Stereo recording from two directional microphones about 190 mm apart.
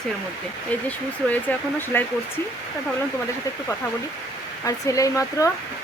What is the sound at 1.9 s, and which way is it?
Speech, 10° left (ahead or behind).